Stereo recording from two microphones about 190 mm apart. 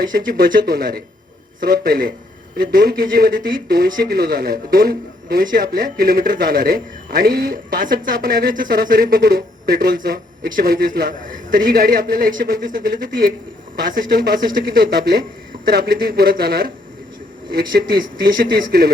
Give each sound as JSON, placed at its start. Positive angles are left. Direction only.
{"t": 0.1, "sound": "speech", "side_deg": -50}